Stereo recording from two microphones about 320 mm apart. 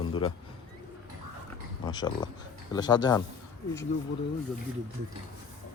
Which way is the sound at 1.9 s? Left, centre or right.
Centre.